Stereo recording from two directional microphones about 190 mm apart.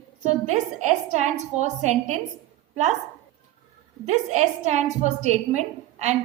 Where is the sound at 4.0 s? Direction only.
40° right (ahead or behind).